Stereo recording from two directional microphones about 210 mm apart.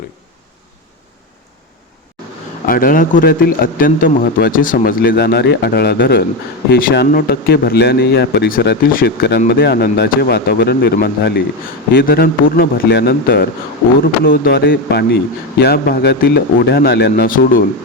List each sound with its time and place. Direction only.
2.6 s a man's voice: 40° left (ahead or behind)